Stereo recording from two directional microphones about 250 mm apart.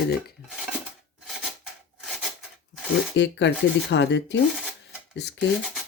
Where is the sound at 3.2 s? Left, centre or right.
Left.